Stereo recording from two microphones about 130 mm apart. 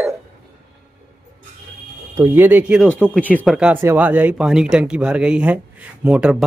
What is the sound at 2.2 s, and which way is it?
Speech, 15° right (ahead or behind).